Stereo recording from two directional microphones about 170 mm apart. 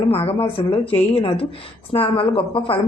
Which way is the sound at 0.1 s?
35° left (ahead or behind).